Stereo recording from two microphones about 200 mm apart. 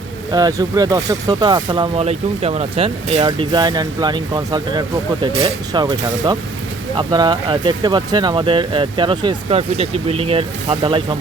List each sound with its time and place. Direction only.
0.3 s speech: 20° right (ahead or behind)